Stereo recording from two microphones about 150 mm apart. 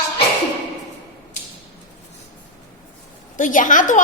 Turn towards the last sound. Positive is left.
turn(degrees=60)  # may be behind; listen again after turning